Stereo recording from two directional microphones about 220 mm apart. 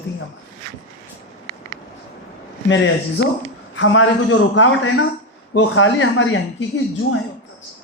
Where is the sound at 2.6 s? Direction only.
60° left (ahead or behind).